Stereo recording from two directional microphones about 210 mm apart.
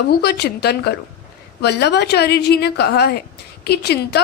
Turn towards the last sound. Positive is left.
turn(degrees=50)  # may be behind; listen again after turning